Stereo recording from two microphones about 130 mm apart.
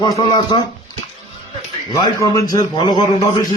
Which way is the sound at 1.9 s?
30° left (ahead or behind).